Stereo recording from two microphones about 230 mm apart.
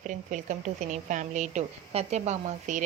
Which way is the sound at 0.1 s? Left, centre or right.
Right.